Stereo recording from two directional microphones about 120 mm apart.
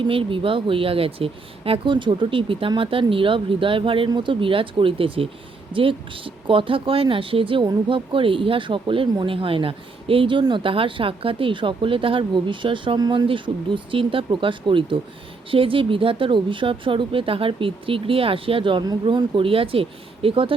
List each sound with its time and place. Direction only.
0.0 s speech: 45° right (ahead or behind)